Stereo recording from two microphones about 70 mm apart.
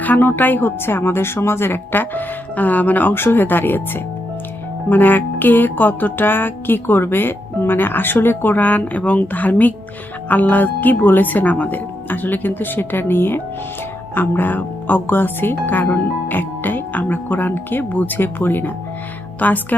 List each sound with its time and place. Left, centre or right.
0.0 s speech: left
4.9 s music: left